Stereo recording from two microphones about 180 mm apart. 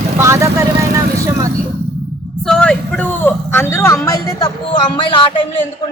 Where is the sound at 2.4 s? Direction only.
5° left (ahead or behind); by 5.5 s 30° left (ahead or behind).